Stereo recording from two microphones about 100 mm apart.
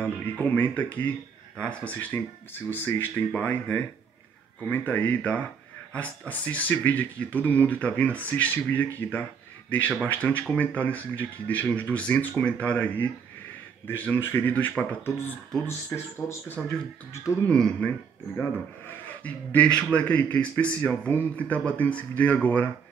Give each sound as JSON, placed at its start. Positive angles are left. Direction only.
{"t": 0.0, "sound": "speech", "side_deg": 20}
{"t": 17.5, "sound": "speech", "side_deg": 10}